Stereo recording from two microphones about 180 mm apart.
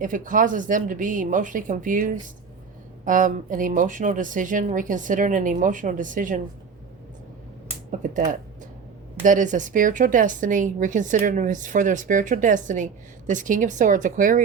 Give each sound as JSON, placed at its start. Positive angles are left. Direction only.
{"t": 0.0, "sound": "a woman's voice", "side_deg": -45}
{"t": 7.9, "sound": "speech", "side_deg": -45}
{"t": 9.2, "sound": "a woman's voice", "side_deg": -45}